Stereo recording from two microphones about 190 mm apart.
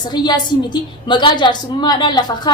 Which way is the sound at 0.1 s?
20° left (ahead or behind).